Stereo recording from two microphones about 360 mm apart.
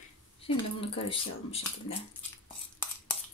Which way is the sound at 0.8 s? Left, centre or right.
Centre.